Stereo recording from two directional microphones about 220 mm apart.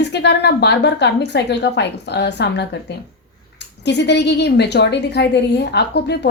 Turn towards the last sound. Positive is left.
turn(degrees=50)  # may be behind; listen again after turning